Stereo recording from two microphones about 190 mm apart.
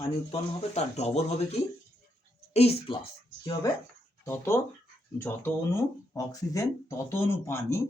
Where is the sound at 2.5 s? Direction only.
30° left (ahead or behind).